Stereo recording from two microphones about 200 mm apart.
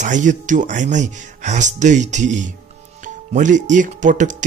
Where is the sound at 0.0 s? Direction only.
40° right (ahead or behind).